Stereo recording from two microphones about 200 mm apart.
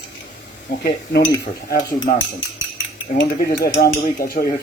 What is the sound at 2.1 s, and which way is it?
Speech, 40° left (ahead or behind).